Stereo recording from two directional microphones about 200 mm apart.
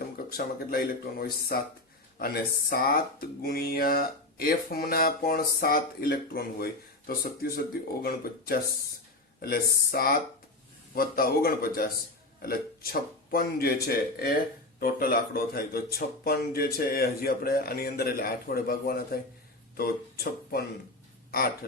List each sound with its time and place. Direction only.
0.3 s speech: 50° left (ahead or behind)
2.1 s speech: 50° left (ahead or behind)